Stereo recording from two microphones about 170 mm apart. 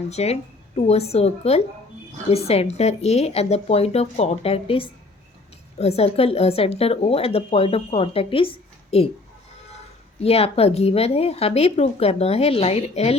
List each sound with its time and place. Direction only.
0.1 s speech: 40° left (ahead or behind)
10.2 s speech: 35° left (ahead or behind)